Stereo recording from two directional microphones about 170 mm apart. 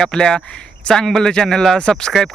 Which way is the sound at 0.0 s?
5° left (ahead or behind).